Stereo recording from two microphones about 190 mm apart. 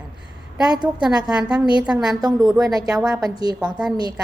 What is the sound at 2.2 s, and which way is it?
Speech, 20° right (ahead or behind).